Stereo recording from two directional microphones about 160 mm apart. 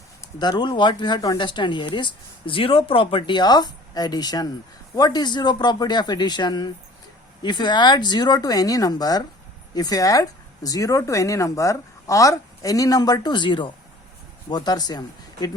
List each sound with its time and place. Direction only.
0.3 s speech: 25° left (ahead or behind)